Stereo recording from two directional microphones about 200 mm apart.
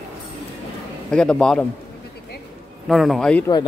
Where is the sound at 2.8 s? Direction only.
Centre (ahead or behind).